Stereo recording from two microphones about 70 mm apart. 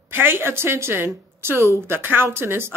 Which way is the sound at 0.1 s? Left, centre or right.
Right.